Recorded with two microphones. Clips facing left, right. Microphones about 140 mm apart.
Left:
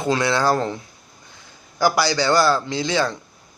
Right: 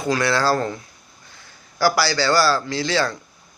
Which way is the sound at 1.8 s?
20° left (ahead or behind).